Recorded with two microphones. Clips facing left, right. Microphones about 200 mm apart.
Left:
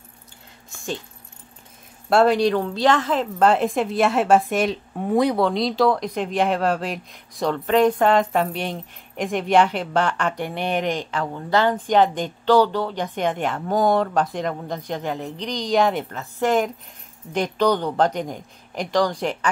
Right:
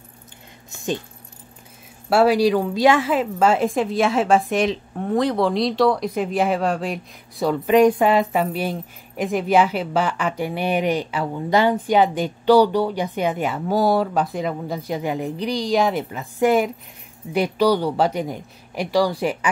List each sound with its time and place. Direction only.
0.7 s a sound: 20° right (ahead or behind)
2.0 s speech: 5° right (ahead or behind); by 5.4 s 10° left (ahead or behind)
5.4 s speech: centre (ahead or behind)